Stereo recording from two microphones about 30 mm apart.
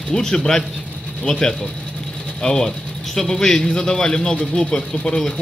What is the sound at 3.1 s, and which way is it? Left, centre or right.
Speech, centre.